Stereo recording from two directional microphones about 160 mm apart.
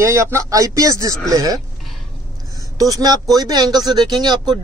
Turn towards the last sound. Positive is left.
turn(degrees=-25)  # may be behind; listen again after turning